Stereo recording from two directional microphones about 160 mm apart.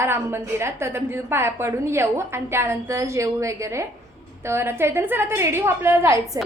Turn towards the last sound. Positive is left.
turn(degrees=-15)  # may be behind; listen again after turning